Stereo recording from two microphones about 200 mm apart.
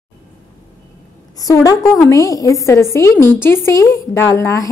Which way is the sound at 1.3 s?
15° left (ahead or behind).